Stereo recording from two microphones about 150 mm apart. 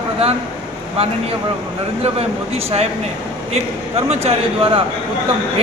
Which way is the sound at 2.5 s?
40° right (ahead or behind).